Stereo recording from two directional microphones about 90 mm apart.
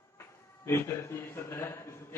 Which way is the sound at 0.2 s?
30° left (ahead or behind).